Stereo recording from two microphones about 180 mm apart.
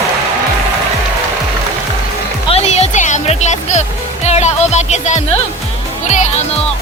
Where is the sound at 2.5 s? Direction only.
40° left (ahead or behind).